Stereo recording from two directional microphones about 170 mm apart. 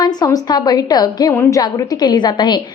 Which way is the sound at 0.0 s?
25° left (ahead or behind).